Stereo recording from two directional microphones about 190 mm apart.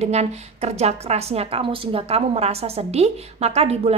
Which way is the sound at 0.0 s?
35° right (ahead or behind).